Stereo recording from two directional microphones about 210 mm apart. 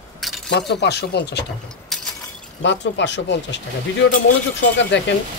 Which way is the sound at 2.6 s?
55° left (ahead or behind).